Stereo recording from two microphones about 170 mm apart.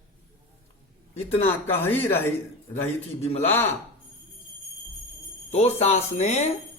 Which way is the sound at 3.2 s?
35° left (ahead or behind).